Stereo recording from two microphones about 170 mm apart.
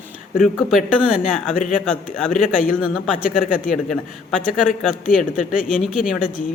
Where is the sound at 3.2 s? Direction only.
50° left (ahead or behind).